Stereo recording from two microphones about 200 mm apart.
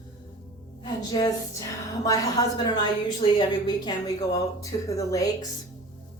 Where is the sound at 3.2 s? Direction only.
20° left (ahead or behind).